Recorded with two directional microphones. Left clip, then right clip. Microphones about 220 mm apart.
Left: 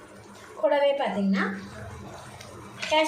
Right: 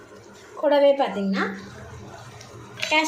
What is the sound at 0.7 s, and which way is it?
Speech, 35° right (ahead or behind).